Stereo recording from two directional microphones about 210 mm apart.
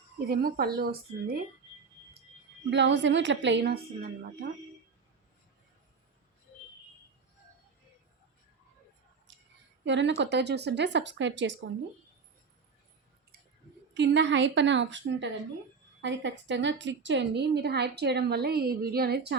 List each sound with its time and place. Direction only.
0.3 s a woman's voice: 45° right (ahead or behind)
2.6 s a woman's voice: 55° right (ahead or behind)
9.8 s a woman's voice: 60° right (ahead or behind)
13.9 s a woman's voice: 55° right (ahead or behind)